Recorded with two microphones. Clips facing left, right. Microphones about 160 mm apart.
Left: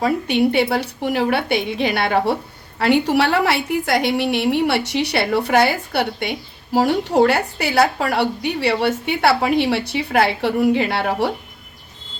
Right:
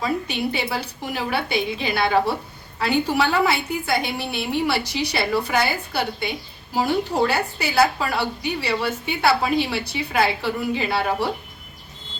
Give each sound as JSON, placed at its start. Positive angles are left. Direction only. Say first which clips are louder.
{"t": 0.0, "sound": "a woman's voice", "louder": "left 7 dB", "side_deg": 70}